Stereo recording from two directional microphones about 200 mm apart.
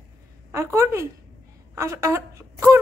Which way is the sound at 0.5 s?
15° right (ahead or behind).